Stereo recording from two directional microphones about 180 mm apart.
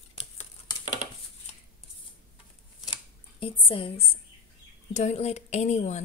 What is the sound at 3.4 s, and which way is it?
A woman's voice, 30° left (ahead or behind).